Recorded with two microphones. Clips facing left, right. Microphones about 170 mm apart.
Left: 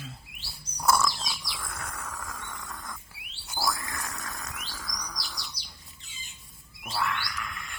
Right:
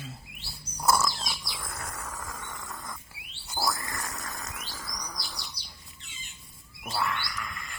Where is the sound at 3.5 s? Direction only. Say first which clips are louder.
Even; centre (ahead or behind).